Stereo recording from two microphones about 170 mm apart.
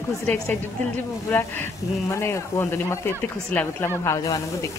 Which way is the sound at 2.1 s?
15° left (ahead or behind).